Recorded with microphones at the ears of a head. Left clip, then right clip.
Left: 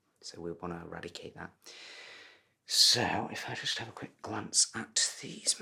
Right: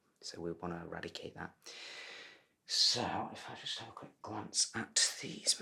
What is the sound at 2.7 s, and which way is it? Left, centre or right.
Speech, left.